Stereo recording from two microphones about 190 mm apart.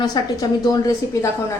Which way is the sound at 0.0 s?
20° left (ahead or behind).